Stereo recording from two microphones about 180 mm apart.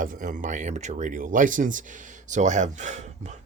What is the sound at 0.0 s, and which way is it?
Speech, 50° right (ahead or behind).